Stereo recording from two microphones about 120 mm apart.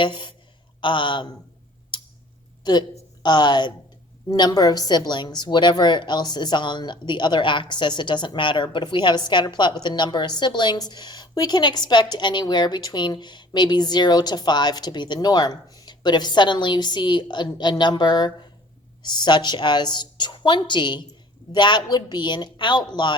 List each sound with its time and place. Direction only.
0.0 s speech: 45° left (ahead or behind)
3.2 s a woman's voice: 35° left (ahead or behind)